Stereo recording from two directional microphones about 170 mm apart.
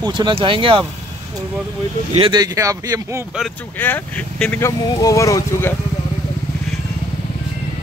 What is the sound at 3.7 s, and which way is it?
Speech, 10° left (ahead or behind).